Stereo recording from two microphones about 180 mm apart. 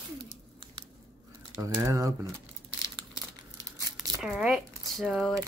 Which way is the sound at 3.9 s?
5° right (ahead or behind).